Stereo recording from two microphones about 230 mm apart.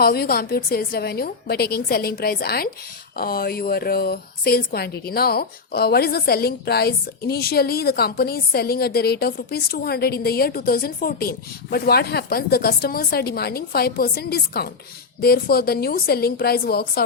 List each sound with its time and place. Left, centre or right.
0.0 s a woman's voice: left